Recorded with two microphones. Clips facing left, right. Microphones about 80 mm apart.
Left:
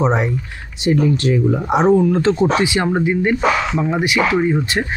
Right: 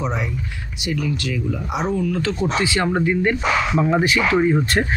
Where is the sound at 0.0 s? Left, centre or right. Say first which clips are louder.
Left 8 dB; left.